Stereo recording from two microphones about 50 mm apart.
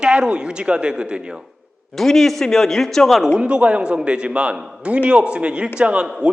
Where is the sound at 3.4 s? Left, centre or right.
Right.